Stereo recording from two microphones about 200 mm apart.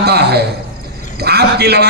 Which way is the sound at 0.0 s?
55° right (ahead or behind).